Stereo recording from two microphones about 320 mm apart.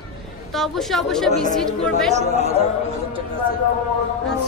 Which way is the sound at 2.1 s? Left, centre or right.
Centre.